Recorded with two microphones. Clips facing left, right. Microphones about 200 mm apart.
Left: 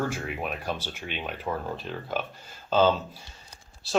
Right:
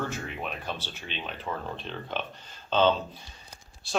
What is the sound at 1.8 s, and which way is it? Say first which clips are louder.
Speech: left 3 dB; 5° left (ahead or behind).